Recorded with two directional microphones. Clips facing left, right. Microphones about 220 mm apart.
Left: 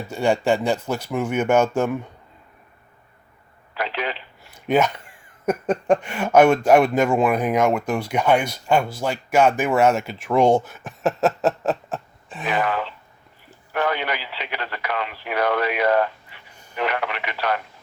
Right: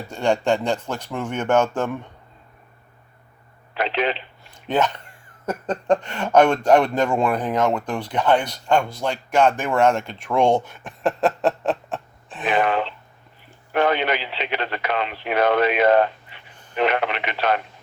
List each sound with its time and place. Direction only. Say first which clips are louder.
0.1 s speech: left 1 dB; 10° left (ahead or behind)
3.8 s a sound: right 4 dB; 25° right (ahead or behind)
4.5 s speech: left 2 dB; 10° left (ahead or behind)
12.5 s speech: right 3 dB; 25° right (ahead or behind)